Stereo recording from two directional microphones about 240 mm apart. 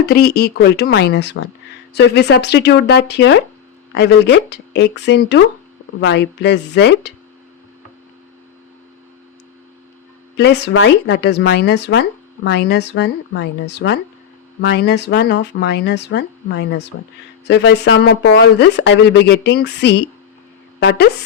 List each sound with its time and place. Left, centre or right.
0.0 s speech: left
10.3 s speech: left